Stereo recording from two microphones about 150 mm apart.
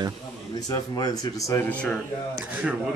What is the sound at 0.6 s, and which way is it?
Speech, 25° left (ahead or behind).